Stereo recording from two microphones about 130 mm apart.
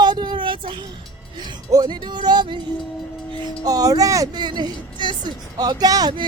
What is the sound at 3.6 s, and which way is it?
A woman's voice, 30° right (ahead or behind).